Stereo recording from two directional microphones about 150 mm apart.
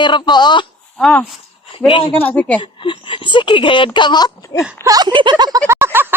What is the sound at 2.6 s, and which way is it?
A woman's voice, 35° left (ahead or behind).